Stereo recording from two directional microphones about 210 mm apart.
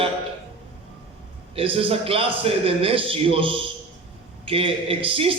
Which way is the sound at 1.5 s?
25° right (ahead or behind).